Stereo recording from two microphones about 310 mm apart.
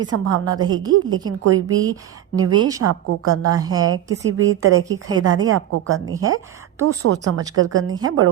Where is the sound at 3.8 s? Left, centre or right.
Right.